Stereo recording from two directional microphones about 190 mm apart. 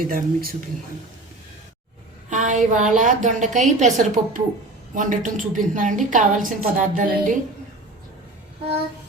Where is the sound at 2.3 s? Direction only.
40° right (ahead or behind).